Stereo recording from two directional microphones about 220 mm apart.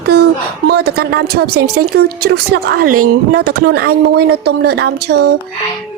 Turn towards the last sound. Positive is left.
turn(degrees=-45)  # may be behind; listen again after turning